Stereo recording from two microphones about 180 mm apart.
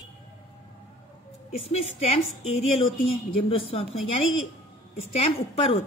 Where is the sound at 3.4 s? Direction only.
30° left (ahead or behind).